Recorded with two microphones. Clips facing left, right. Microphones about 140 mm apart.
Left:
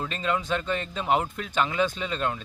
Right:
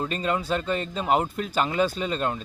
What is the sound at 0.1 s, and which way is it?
Speech, 40° right (ahead or behind).